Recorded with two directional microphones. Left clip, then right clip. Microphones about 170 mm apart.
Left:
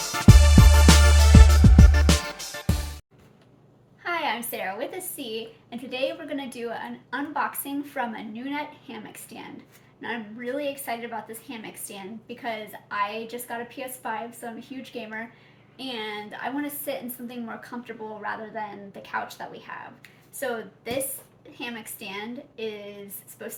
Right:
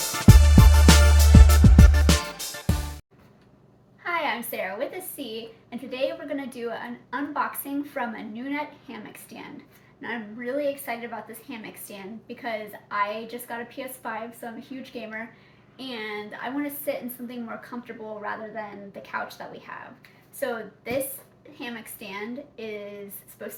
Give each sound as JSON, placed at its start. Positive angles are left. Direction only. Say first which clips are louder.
{"t": 0.1, "sound": "music", "louder": "left 2 dB", "side_deg": 0}
{"t": 4.0, "sound": "a woman's voice", "louder": "even", "side_deg": 15}
{"t": 10.0, "sound": "a woman's voice", "louder": "even", "side_deg": 15}